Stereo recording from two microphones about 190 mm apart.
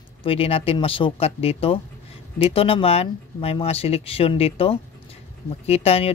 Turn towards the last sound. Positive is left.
turn(degrees=30)  # may be behind; listen again after turning